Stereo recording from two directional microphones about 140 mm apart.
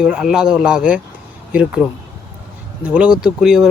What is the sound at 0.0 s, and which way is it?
Speech, 5° right (ahead or behind).